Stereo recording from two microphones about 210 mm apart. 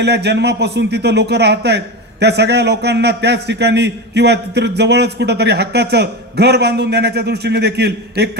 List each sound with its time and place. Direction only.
0.0 s speech: 55° right (ahead or behind)